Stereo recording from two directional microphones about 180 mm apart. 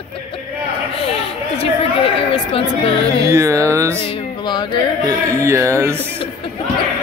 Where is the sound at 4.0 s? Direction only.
30° left (ahead or behind).